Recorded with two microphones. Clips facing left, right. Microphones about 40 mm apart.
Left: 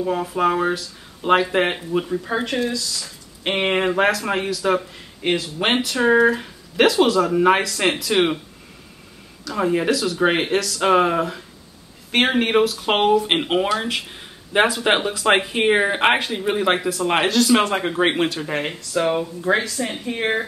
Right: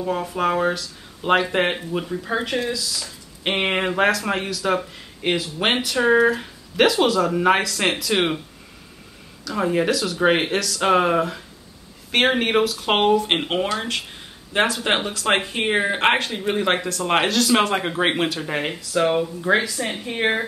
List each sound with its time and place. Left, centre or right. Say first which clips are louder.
0.0 s speech: left 2 dB; centre
9.4 s speech: even; centre
20.1 s speech: right 1 dB; centre